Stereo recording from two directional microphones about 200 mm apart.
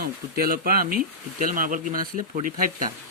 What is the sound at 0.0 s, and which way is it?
Speech, 50° right (ahead or behind).